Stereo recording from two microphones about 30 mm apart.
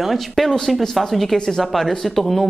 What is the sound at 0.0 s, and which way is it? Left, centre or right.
Speech, centre.